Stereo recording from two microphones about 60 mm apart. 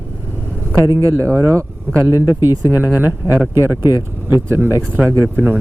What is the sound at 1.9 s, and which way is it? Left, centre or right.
Speech, right.